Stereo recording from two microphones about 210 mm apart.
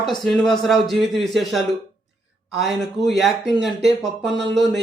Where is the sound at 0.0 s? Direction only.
Centre (ahead or behind).